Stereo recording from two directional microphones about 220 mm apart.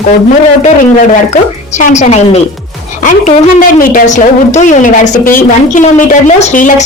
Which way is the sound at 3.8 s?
35° left (ahead or behind).